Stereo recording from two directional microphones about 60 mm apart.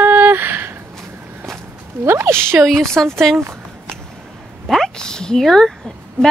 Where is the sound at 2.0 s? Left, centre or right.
Right.